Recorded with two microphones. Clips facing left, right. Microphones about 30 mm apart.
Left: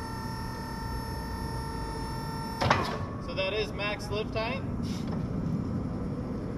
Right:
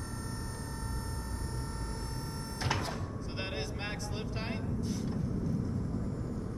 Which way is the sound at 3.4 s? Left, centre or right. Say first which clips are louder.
Left 9 dB; left.